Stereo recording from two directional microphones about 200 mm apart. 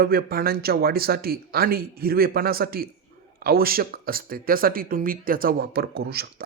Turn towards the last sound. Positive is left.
turn(degrees=-50)  # may be behind; listen again after turning